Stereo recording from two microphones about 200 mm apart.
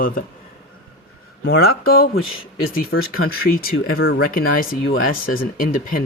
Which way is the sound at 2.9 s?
75° left (ahead or behind).